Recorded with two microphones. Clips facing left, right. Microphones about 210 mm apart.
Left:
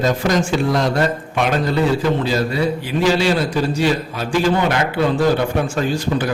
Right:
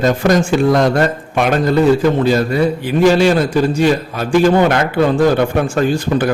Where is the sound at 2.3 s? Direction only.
50° right (ahead or behind).